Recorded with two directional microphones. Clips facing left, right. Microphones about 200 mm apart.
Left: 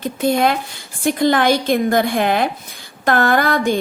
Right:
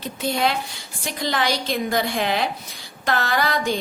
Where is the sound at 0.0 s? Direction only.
50° left (ahead or behind).